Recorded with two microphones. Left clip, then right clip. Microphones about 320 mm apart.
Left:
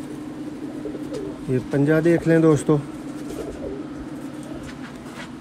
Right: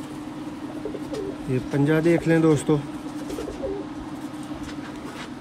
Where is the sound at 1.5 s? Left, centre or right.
Centre.